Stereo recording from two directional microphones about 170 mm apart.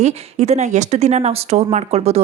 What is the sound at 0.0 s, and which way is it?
A woman's voice, 40° right (ahead or behind).